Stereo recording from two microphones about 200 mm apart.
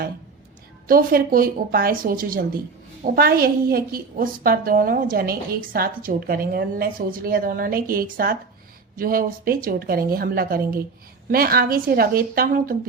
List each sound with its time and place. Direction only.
0.9 s a woman's voice: 45° right (ahead or behind)